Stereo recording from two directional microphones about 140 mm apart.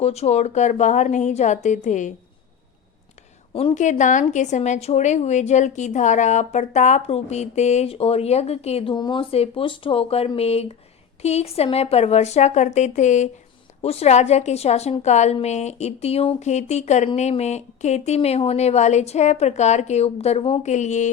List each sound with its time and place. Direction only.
0.0 s a woman's voice: 50° left (ahead or behind)
3.5 s a woman's voice: 40° left (ahead or behind)
3.8 s a woman's voice: 60° left (ahead or behind)
13.8 s speech: 50° left (ahead or behind)
20.7 s a woman's voice: 55° left (ahead or behind)